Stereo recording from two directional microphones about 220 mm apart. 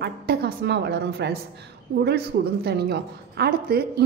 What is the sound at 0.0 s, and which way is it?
A woman's voice, 50° right (ahead or behind).